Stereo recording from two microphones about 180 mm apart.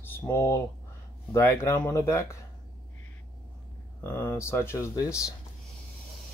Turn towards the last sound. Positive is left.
turn(degrees=15)  # may be behind; listen again after turning